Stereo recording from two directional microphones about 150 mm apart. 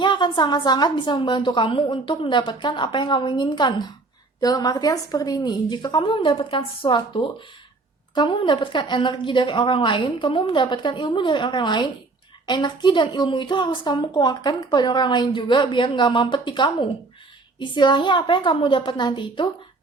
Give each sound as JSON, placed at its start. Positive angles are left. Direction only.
{"t": 0.0, "sound": "a woman's voice", "side_deg": 30}